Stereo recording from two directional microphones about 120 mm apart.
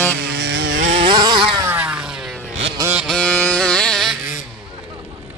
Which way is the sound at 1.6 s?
15° right (ahead or behind).